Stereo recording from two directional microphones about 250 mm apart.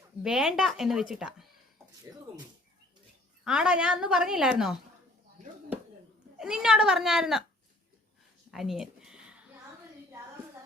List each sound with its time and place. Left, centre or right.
0.2 s a woman's voice: centre
3.4 s a woman's voice: centre
6.3 s a woman's voice: centre
8.4 s a sound: centre